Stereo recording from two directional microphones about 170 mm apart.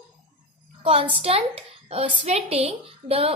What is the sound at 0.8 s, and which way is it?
A woman's voice, 35° right (ahead or behind).